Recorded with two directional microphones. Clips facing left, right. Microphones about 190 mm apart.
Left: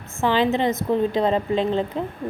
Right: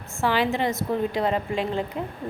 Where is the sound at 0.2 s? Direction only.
20° left (ahead or behind).